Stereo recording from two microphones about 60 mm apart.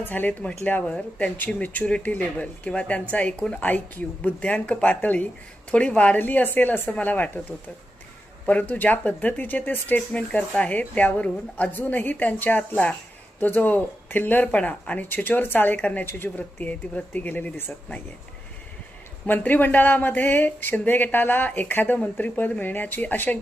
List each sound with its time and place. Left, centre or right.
0.0 s speech: left
0.9 s speech: centre
1.6 s speech: left
6.1 s speech: left
8.4 s speech: left
19.3 s speech: left